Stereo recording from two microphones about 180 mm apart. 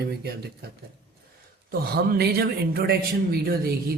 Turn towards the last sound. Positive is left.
turn(degrees=-60)  # may be behind; listen again after turning